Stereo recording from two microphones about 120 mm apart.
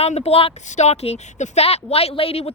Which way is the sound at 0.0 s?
60° left (ahead or behind).